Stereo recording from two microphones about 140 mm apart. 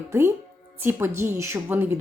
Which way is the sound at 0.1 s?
20° right (ahead or behind).